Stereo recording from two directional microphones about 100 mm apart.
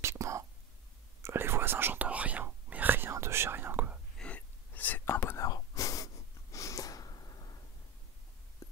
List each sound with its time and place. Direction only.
0.0 s whispering: 30° right (ahead or behind)
4.2 s whispering: 15° left (ahead or behind)
5.5 s whispering: 35° left (ahead or behind)
6.5 s snort: 35° left (ahead or behind)